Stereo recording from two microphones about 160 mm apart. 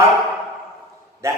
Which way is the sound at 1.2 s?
15° right (ahead or behind).